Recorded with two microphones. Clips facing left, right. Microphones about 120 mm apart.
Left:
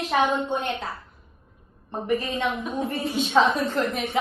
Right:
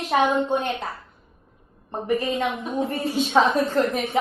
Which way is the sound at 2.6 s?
30° right (ahead or behind).